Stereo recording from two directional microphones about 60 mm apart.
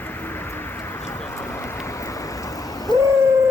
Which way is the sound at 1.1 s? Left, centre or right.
Left.